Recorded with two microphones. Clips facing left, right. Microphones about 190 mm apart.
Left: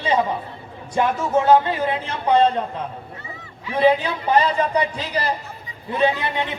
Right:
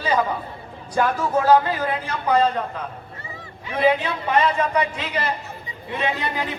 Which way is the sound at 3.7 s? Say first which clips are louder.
Left 2 dB; 30° left (ahead or behind).